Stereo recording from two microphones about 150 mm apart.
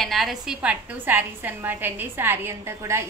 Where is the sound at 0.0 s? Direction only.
Centre (ahead or behind).